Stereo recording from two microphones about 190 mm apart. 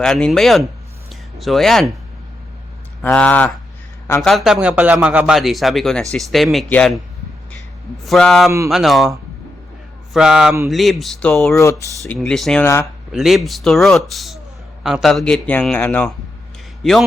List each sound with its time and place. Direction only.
0.0 s a man's voice: centre (ahead or behind)
1.1 s a sound: centre (ahead or behind)
3.0 s a man's voice: 10° left (ahead or behind)
8.0 s a man's voice: centre (ahead or behind)
8.4 s a sound: 15° right (ahead or behind)
8.7 s a man's voice: centre (ahead or behind)
11.6 s speech: 15° left (ahead or behind)
12.0 s a man's voice: centre (ahead or behind)
12.6 s speech: 15° left (ahead or behind)
13.1 s a man's voice: centre (ahead or behind)